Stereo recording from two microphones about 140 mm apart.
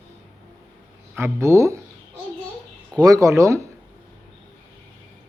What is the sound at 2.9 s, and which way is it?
Speech, 25° right (ahead or behind).